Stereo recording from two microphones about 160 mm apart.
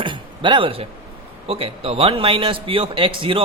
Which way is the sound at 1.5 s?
35° right (ahead or behind).